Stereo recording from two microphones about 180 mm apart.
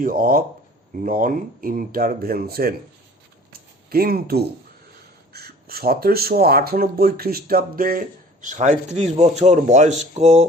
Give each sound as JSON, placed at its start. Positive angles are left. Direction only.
{"t": 0.0, "sound": "speech", "side_deg": -50}
{"t": 3.8, "sound": "speech", "side_deg": -55}